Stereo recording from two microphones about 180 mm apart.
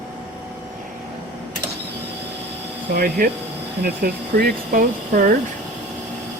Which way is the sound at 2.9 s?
60° right (ahead or behind).